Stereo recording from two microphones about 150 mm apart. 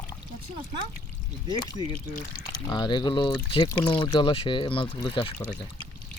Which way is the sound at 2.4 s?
30° left (ahead or behind).